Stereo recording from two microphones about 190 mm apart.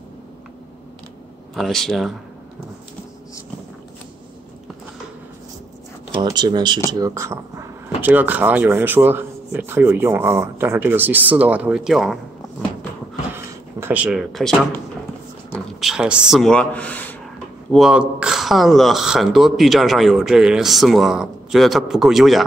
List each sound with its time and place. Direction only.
1.5 s speech: centre (ahead or behind)
6.1 s speech: 20° right (ahead or behind); by 12.2 s centre (ahead or behind)
13.3 s a sound: 10° right (ahead or behind)
15.5 s speech: 5° right (ahead or behind)
17.7 s speech: 5° right (ahead or behind)